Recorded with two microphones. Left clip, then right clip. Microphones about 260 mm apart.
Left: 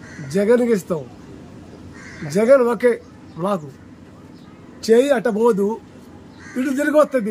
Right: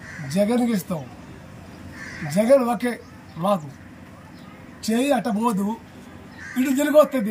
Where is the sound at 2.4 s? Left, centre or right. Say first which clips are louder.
Left 4 dB; left.